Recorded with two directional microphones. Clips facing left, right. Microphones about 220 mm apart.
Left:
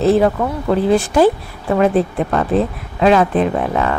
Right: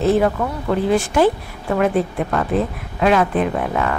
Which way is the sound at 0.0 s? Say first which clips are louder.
Left 3 dB; 35° left (ahead or behind).